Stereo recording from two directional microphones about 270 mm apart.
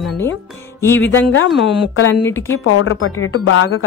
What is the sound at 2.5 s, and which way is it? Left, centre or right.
Speech, left.